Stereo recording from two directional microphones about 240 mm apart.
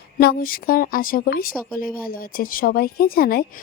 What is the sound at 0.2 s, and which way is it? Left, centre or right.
A woman's voice, left.